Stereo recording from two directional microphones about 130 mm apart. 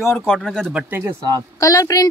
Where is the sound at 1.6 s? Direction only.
25° left (ahead or behind).